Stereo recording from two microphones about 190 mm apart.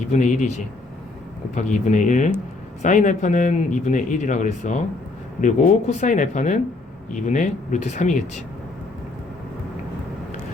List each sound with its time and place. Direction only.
0.1 s speech: 40° left (ahead or behind)